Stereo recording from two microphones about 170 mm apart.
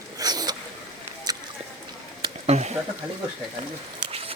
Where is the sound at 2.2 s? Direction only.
40° right (ahead or behind).